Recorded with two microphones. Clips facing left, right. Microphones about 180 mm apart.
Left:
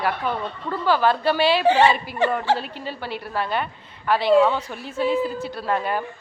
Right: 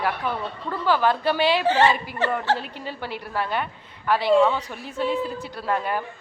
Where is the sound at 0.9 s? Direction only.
15° right (ahead or behind).